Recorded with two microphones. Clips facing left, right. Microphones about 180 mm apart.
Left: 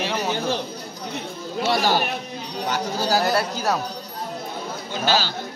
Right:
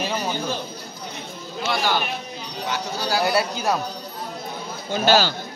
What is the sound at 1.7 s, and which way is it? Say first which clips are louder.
Speech: left 2 dB; 40° left (ahead or behind).